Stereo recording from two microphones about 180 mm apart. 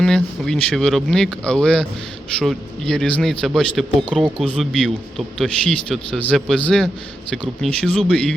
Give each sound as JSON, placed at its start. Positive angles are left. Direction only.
{"t": 0.0, "sound": "speech", "side_deg": 5}